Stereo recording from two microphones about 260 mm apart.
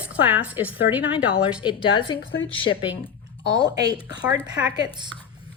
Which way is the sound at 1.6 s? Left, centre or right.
Centre.